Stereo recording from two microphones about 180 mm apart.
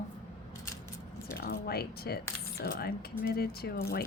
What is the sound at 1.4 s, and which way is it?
A woman's voice, 60° left (ahead or behind).